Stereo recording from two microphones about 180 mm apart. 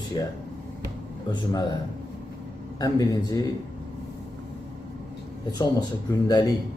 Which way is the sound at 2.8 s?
20° left (ahead or behind).